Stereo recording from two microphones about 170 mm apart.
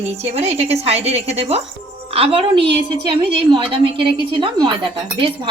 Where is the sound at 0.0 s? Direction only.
40° right (ahead or behind).